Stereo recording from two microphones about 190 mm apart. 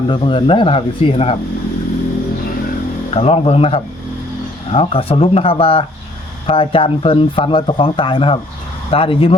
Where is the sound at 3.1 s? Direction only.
30° left (ahead or behind).